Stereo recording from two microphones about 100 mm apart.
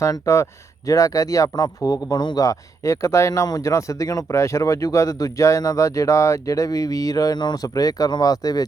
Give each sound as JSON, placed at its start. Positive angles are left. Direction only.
{"t": 0.0, "sound": "speech", "side_deg": 30}